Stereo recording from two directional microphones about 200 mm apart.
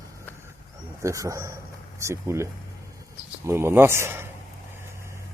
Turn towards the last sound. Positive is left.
turn(degrees=-10)  # may be behind; listen again after turning